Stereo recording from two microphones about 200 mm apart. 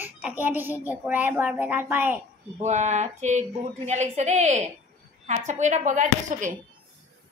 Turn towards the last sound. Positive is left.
turn(degrees=-40)  # may be behind; listen again after turning